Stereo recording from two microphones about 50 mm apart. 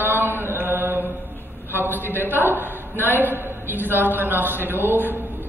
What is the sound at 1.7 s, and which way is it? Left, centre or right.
A man's voice, right.